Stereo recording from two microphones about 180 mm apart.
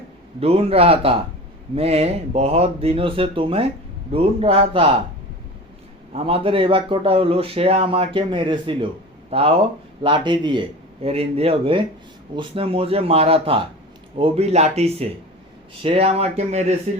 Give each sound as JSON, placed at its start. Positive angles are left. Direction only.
{"t": 0.3, "sound": "a man's voice", "side_deg": -35}
{"t": 6.1, "sound": "a man's voice", "side_deg": -30}